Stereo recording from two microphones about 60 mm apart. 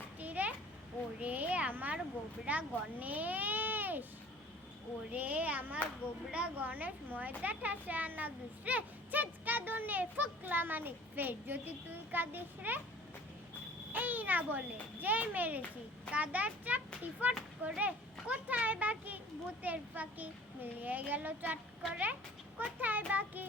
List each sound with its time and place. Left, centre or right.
0.2 s children playing: right
1.2 s a sound: right
2.4 s speech: right
5.1 s a child's voice: right
13.9 s a sound: right
15.0 s a child's voice: right